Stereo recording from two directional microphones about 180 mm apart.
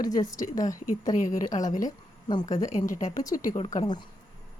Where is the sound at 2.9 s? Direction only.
45° left (ahead or behind).